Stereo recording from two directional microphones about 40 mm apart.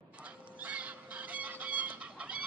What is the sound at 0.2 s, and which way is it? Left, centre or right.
Chicken, right.